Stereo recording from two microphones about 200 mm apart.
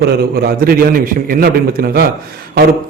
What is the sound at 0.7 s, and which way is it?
Speech, 45° right (ahead or behind).